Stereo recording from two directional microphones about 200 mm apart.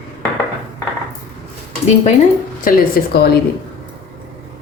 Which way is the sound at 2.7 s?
45° left (ahead or behind).